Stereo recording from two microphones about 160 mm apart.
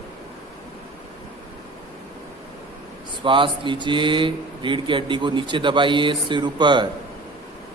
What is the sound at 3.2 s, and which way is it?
Speech, 30° right (ahead or behind).